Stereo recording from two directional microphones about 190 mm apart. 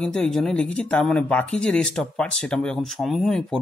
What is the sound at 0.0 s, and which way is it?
Speech, 5° left (ahead or behind).